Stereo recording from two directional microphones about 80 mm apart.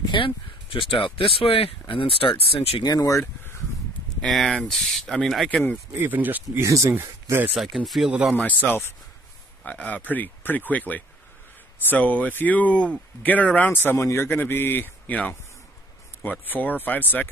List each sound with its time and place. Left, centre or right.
0.0 s a sound: left
0.7 s speech: left
2.8 s speech: left
4.2 s speech: centre
5.5 s a man's voice: left
5.9 s speech: right
6.6 s speech: right
7.5 s speech: centre
8.4 s a man's voice: centre